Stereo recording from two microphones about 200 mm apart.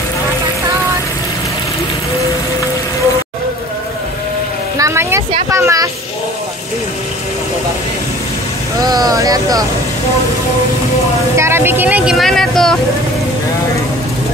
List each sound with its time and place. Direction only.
4.7 s speech: 15° right (ahead or behind)
8.7 s speech: 20° right (ahead or behind)
11.3 s speech: 15° right (ahead or behind)